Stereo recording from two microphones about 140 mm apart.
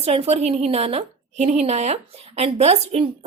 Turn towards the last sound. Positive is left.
turn(degrees=-50)  # may be behind; listen again after turning